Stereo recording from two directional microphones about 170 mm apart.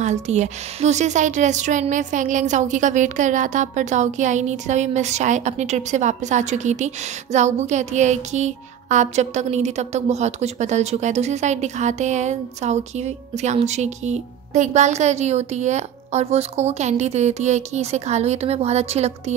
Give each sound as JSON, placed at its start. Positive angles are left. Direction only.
{"t": 0.0, "sound": "a woman's voice", "side_deg": -40}